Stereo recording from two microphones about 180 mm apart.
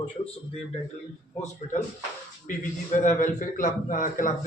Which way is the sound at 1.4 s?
45° left (ahead or behind).